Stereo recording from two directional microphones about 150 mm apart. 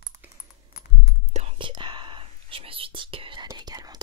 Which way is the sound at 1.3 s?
45° right (ahead or behind).